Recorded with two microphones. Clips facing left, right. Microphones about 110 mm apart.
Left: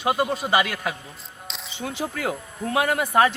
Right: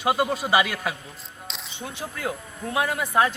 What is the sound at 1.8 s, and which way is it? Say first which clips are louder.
A man's voice: left 4 dB; 90° left.